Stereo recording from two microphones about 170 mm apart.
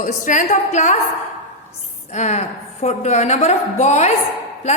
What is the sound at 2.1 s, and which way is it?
A woman's voice, 40° left (ahead or behind).